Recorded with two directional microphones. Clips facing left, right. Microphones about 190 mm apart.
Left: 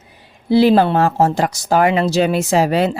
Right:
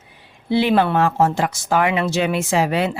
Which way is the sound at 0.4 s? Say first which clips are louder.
Left 5 dB; 40° left (ahead or behind).